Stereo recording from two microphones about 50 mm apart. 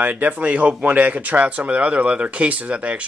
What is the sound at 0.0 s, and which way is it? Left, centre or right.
Speech, right.